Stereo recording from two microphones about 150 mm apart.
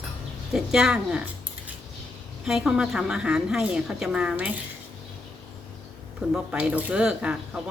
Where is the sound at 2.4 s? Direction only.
5° right (ahead or behind).